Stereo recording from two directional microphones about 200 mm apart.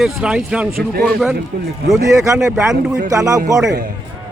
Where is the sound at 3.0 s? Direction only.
15° right (ahead or behind).